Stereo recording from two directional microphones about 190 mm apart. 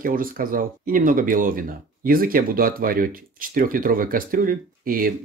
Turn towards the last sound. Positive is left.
turn(degrees=-50)  # may be behind; listen again after turning